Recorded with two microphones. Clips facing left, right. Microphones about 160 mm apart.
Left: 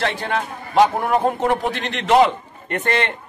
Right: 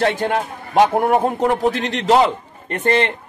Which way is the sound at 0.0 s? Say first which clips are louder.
Right 5 dB; 45° right (ahead or behind).